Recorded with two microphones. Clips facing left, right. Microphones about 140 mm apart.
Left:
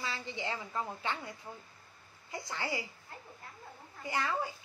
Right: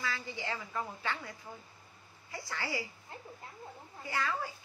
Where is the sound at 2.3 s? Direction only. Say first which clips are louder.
Left 1 dB; 20° left (ahead or behind).